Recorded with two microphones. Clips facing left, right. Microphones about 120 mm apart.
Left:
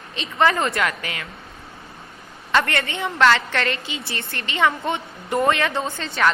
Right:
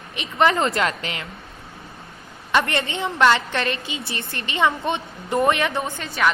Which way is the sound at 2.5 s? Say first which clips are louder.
Even; 20° right (ahead or behind).